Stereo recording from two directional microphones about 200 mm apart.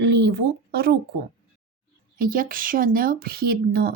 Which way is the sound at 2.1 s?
45° right (ahead or behind).